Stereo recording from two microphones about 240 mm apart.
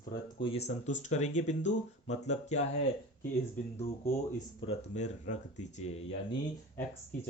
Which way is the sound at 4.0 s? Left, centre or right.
Left.